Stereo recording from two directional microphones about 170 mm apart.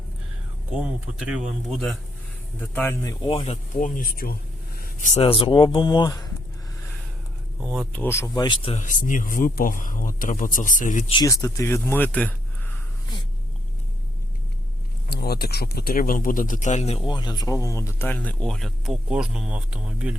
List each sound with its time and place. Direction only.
1.2 s speech: 5° right (ahead or behind)
2.6 s speech: 10° left (ahead or behind)
3.2 s speech: 35° left (ahead or behind)
3.8 s speech: 50° left (ahead or behind)
4.8 s a sound: 45° left (ahead or behind)
5.2 s speech: 30° left (ahead or behind)
7.6 s speech: centre (ahead or behind)
7.9 s speech: 15° left (ahead or behind)
8.4 s speech: 25° left (ahead or behind)
8.7 s a man's voice: 50° left (ahead or behind)
11.1 s speech: 20° left (ahead or behind)
15.1 s speech: 65° left (ahead or behind); by 20.1 s 5° right (ahead or behind)